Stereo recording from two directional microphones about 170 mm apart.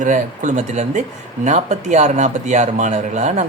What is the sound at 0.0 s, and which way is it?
Speech, 45° right (ahead or behind).